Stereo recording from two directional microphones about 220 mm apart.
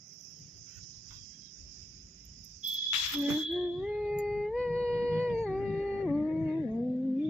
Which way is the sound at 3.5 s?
Centre (ahead or behind).